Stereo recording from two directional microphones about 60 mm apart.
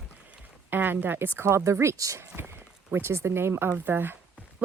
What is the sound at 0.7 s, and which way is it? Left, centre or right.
Speech, right.